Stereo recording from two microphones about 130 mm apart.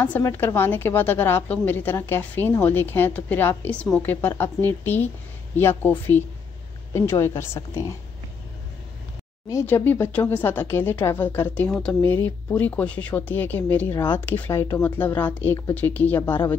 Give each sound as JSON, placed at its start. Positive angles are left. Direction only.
{"t": 0.0, "sound": "a woman's voice", "side_deg": 15}
{"t": 9.5, "sound": "a woman's voice", "side_deg": 20}